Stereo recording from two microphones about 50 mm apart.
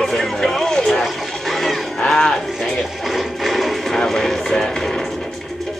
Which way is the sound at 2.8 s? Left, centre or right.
Centre.